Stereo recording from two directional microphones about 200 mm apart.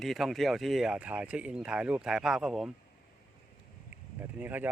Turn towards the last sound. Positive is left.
turn(degrees=-10)  # may be behind; listen again after turning